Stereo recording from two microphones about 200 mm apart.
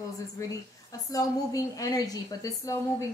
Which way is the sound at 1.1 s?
15° left (ahead or behind).